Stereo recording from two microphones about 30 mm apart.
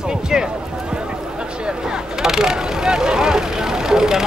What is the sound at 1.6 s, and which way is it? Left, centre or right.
Vehicle, right.